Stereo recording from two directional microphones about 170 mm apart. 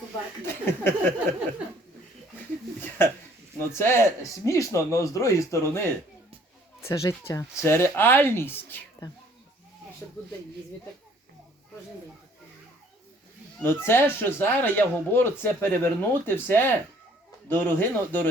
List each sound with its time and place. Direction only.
0.4 s speech: 15° left (ahead or behind)
3.6 s speech: 15° left (ahead or behind)
13.6 s speech: 15° left (ahead or behind)